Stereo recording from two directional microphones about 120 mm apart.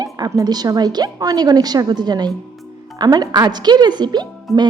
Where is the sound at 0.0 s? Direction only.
30° right (ahead or behind).